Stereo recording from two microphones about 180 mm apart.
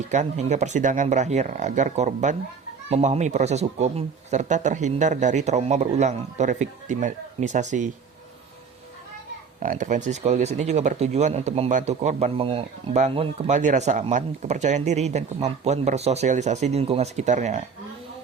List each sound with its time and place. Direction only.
0.1 s speech: 40° right (ahead or behind)
9.6 s speech: 45° right (ahead or behind)